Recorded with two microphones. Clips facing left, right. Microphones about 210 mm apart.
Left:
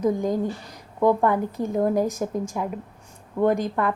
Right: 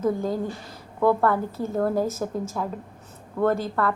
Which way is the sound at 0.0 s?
15° left (ahead or behind).